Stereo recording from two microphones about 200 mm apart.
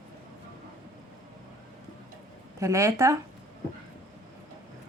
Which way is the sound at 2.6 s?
15° right (ahead or behind).